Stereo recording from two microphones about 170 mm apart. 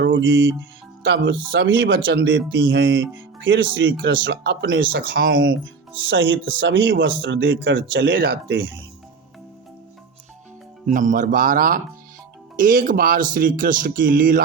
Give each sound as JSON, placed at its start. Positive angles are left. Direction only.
{"t": 0.0, "sound": "music", "side_deg": -90}
{"t": 1.0, "sound": "speech", "side_deg": -90}
{"t": 5.2, "sound": "speech", "side_deg": -75}
{"t": 6.0, "sound": "speech", "side_deg": -90}
{"t": 10.8, "sound": "a man's voice", "side_deg": -50}